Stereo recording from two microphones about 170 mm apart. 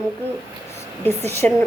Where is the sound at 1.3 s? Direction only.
15° left (ahead or behind).